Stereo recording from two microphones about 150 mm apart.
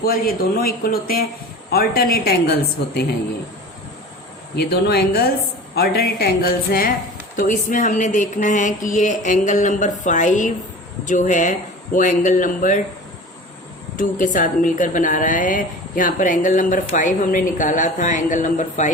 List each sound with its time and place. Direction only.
0.0 s a woman's voice: 85° left
4.5 s a woman's voice: 90° left
7.3 s a woman's voice: 60° left (ahead or behind)
13.9 s a woman's voice: 60° left (ahead or behind)